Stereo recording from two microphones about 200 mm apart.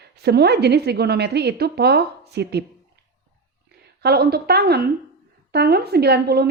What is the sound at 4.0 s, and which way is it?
Speech, 50° right (ahead or behind).